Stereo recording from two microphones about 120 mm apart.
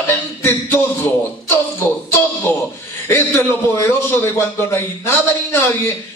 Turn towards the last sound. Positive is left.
turn(degrees=20)  # may be behind; listen again after turning